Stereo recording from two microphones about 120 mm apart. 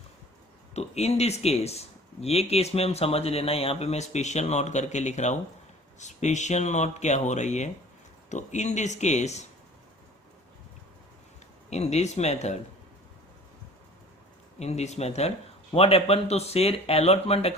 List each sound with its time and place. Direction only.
0.7 s speech: 65° left (ahead or behind)
11.7 s speech: 70° left (ahead or behind)
14.6 s speech: 65° left (ahead or behind)